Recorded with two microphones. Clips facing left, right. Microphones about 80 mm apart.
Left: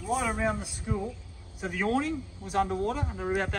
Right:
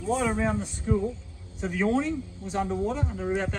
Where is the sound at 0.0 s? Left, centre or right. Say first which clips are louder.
Right 2 dB; centre.